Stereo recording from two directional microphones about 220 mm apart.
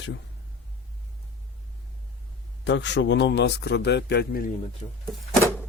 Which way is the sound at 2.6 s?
55° left (ahead or behind).